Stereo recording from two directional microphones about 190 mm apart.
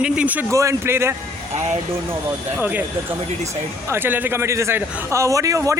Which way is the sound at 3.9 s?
10° right (ahead or behind).